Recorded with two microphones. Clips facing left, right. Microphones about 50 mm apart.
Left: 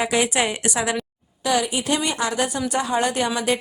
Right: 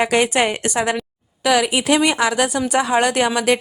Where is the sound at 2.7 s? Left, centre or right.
Right.